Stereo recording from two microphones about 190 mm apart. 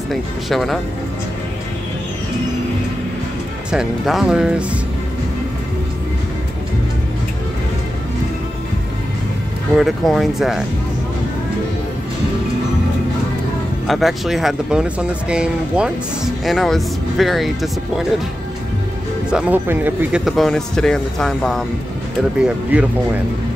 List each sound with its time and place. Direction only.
0.1 s speech: centre (ahead or behind)
3.7 s speech: centre (ahead or behind)
9.8 s speech: centre (ahead or behind)
13.8 s speech: centre (ahead or behind)
19.3 s speech: 10° right (ahead or behind)